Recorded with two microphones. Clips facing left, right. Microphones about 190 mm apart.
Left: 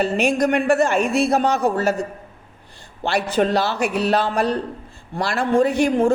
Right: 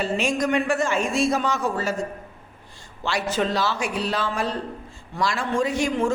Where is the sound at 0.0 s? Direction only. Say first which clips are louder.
Left 5 dB; 65° left (ahead or behind).